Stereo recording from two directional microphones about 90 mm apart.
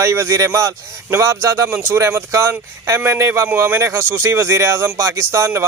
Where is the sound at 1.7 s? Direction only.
25° right (ahead or behind).